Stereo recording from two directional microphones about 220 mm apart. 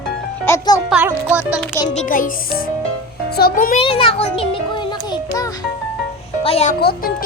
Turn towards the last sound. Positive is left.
turn(degrees=45)  # may be behind; listen again after turning